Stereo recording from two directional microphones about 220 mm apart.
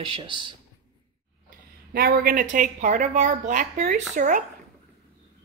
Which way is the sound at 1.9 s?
45° right (ahead or behind).